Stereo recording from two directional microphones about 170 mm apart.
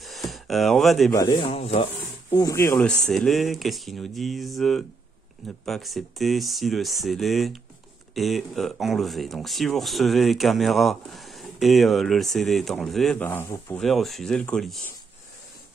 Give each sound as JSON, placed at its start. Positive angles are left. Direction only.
{"t": 0.0, "sound": "a sound", "side_deg": 0}
{"t": 1.1, "sound": "speech", "side_deg": 20}
{"t": 1.4, "sound": "speech", "side_deg": 35}
{"t": 2.3, "sound": "speech", "side_deg": 20}
{"t": 3.0, "sound": "speech", "side_deg": 0}
{"t": 13.7, "sound": "speech", "side_deg": 0}